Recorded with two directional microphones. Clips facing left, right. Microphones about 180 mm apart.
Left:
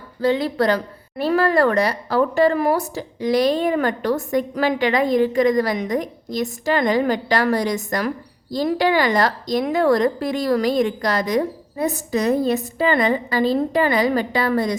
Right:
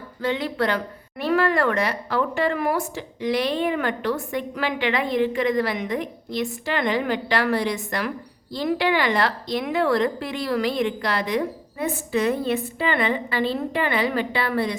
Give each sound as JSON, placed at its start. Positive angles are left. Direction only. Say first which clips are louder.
{"t": 0.2, "sound": "a woman's voice", "louder": "left 5 dB", "side_deg": 35}